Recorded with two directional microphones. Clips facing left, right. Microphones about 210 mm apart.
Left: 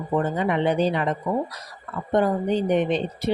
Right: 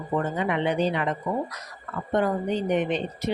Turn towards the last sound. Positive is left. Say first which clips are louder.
# left 3 dB
turn(degrees=30)  # may be behind; listen again after turning